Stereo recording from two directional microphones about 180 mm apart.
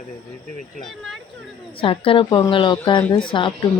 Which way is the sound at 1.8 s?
30° left (ahead or behind).